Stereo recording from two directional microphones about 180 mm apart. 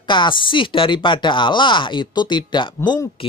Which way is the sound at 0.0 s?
25° left (ahead or behind).